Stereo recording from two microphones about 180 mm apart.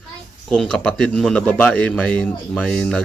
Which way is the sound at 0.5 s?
5° left (ahead or behind).